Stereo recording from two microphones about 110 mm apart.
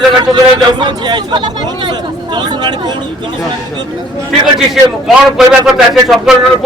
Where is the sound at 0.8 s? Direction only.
40° right (ahead or behind).